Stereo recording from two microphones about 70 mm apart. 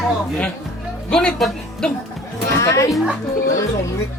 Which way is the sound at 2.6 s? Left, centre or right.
Left.